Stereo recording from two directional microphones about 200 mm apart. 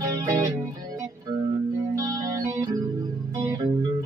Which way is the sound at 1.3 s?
20° right (ahead or behind).